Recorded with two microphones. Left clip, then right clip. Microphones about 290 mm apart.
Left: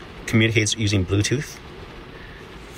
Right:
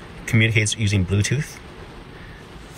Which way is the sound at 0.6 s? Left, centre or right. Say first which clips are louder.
Left 1 dB; centre.